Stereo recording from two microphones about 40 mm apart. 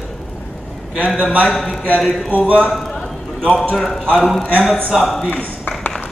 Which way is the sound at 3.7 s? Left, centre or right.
Centre.